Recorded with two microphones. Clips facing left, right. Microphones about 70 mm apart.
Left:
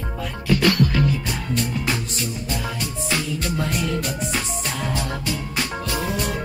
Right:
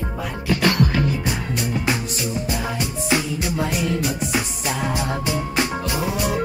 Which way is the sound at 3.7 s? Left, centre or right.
Centre.